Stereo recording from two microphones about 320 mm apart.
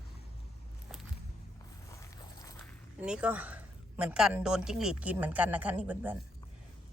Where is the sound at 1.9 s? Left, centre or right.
Centre.